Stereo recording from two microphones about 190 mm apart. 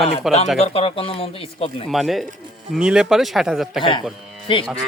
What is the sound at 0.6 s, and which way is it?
Speech, 30° left (ahead or behind).